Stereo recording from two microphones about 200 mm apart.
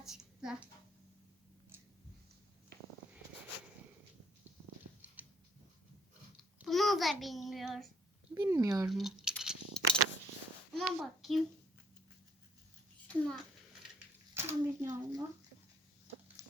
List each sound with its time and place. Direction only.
0.0 s a sound: centre (ahead or behind)
5.0 s mechanisms: 10° right (ahead or behind)
6.7 s child singing: centre (ahead or behind)
8.4 s speech: 15° right (ahead or behind)
8.9 s a sound: centre (ahead or behind)
10.8 s a child's voice: centre (ahead or behind)
13.1 s a child's voice: 5° left (ahead or behind)
14.3 s a child's voice: 15° right (ahead or behind)